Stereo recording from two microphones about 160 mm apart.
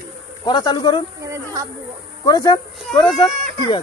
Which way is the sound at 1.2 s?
20° right (ahead or behind).